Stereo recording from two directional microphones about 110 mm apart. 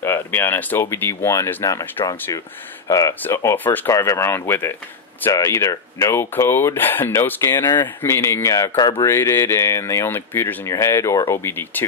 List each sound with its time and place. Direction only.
0.0 s speech: 20° left (ahead or behind)
2.9 s speech: 30° left (ahead or behind)
3.2 s speech: 20° left (ahead or behind)
3.9 s speech: 25° left (ahead or behind)